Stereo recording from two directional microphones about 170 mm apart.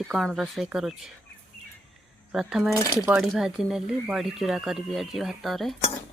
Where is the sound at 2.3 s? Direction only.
5° right (ahead or behind).